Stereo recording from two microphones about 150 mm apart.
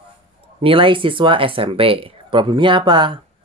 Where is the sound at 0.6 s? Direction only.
35° right (ahead or behind).